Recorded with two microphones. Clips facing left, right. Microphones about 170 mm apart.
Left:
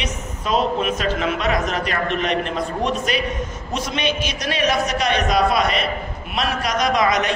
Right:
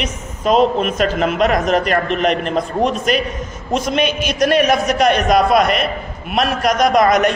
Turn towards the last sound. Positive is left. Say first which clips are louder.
# right 6 dB
turn(degrees=-50)  # may be behind; listen again after turning